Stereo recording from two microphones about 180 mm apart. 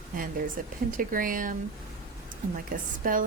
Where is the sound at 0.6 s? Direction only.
50° right (ahead or behind).